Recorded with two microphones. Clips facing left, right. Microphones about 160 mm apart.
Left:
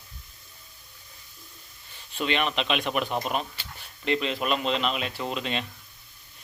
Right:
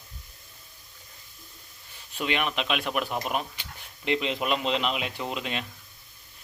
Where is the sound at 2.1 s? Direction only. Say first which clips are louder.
Left 2 dB; 10° right (ahead or behind).